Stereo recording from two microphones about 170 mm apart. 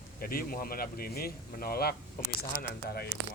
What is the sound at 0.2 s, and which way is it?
Speech, 60° left (ahead or behind).